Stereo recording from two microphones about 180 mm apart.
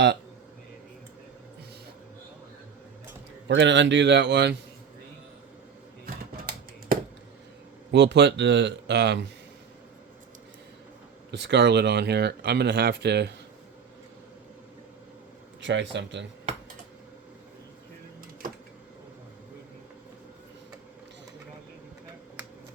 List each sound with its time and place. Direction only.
3.4 s speech: 80° right
6.1 s typewriter: 55° right (ahead or behind)
7.9 s speech: 75° right (ahead or behind)
11.3 s speech: 70° right (ahead or behind)
15.6 s a man's voice: 85° right